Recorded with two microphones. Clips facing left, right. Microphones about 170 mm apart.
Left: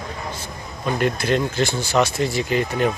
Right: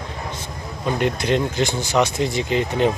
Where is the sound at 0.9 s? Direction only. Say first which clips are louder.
Even; 20° right (ahead or behind).